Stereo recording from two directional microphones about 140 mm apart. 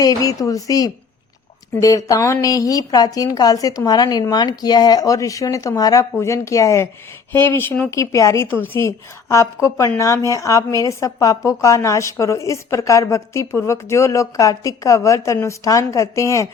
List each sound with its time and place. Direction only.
0.0 s a woman's voice: 25° left (ahead or behind)